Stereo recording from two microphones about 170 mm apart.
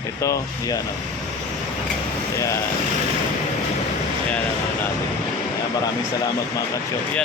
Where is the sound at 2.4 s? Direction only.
20° left (ahead or behind).